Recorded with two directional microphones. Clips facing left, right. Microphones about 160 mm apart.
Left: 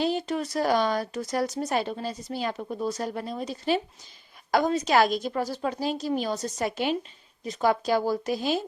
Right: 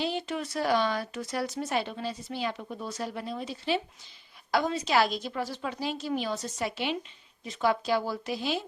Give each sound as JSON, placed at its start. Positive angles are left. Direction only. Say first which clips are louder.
{"t": 0.0, "sound": "speech", "louder": "left 5 dB", "side_deg": 40}